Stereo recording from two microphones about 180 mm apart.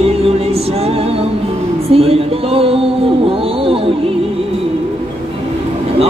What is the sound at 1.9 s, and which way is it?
Music, 30° right (ahead or behind).